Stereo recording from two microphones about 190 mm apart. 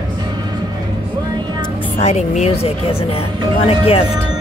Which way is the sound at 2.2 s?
35° left (ahead or behind).